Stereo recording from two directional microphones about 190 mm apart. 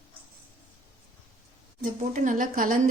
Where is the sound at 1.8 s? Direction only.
45° right (ahead or behind).